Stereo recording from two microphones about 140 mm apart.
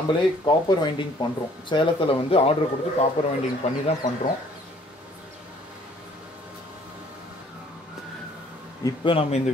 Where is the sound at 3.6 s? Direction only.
55° left (ahead or behind).